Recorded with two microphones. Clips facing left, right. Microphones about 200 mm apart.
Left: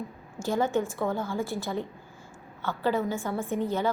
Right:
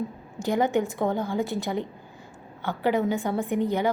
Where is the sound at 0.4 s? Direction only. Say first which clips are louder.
Right 3 dB; 15° right (ahead or behind).